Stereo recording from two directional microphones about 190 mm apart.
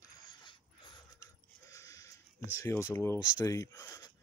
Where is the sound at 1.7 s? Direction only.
15° left (ahead or behind).